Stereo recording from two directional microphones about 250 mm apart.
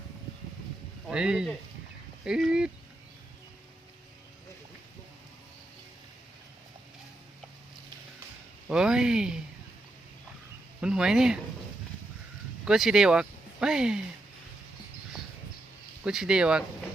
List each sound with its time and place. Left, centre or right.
1.0 s speech: centre
8.7 s speech: centre
10.8 s speech: centre
12.6 s speech: centre
16.0 s speech: centre